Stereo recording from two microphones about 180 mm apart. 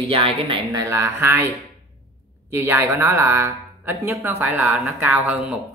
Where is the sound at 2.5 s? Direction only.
15° right (ahead or behind).